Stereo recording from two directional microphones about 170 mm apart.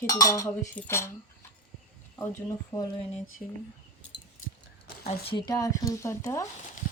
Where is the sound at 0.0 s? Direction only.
20° left (ahead or behind).